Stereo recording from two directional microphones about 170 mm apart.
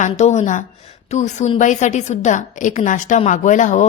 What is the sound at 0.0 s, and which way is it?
A woman's voice, 40° left (ahead or behind).